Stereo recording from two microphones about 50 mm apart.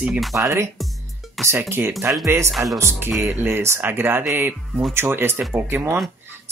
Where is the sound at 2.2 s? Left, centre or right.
Right.